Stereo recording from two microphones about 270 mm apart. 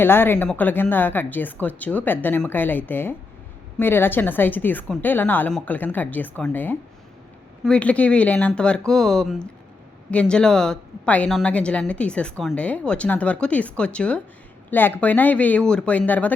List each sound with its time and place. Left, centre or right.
0.0 s a woman's voice: centre